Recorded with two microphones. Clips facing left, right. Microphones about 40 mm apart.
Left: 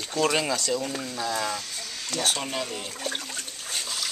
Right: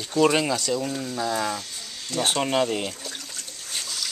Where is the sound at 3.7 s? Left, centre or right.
Centre.